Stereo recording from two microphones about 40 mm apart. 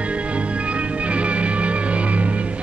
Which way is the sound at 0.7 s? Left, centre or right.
Right.